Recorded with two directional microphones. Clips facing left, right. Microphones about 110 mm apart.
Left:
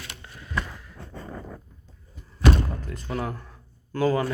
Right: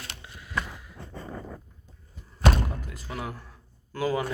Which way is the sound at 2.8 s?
5° right (ahead or behind).